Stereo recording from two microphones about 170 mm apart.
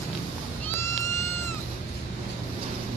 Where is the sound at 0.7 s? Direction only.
15° left (ahead or behind).